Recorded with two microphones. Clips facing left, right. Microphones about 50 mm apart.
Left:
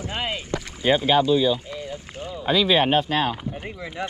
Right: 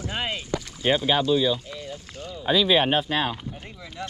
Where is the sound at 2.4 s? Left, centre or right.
Centre.